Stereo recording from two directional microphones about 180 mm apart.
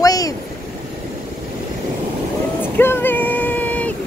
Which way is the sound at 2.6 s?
10° left (ahead or behind).